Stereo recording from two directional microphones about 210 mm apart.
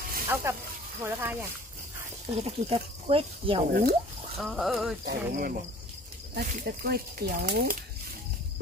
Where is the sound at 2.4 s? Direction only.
30° right (ahead or behind).